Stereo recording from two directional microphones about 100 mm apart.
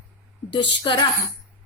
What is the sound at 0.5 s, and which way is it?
Speech, 55° left (ahead or behind).